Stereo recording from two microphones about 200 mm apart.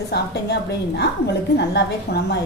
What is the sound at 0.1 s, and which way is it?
A woman's voice, 55° left (ahead or behind).